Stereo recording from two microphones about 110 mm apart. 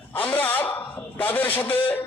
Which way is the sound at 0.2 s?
15° left (ahead or behind).